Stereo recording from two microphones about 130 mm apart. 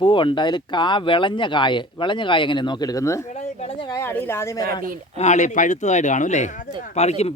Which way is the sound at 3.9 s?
15° left (ahead or behind).